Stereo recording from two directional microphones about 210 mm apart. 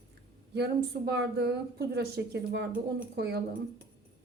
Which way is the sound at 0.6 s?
50° right (ahead or behind).